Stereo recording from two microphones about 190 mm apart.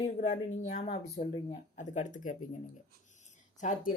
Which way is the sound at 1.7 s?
40° left (ahead or behind).